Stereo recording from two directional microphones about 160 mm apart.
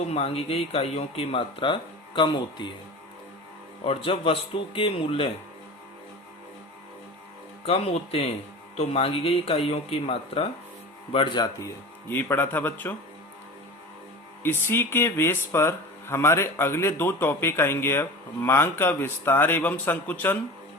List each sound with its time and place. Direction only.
0.1 s speech: 40° left (ahead or behind)
3.8 s speech: 35° left (ahead or behind)
7.6 s speech: 40° left (ahead or behind)
12.0 s speech: 15° left (ahead or behind)
14.4 s speech: 15° left (ahead or behind)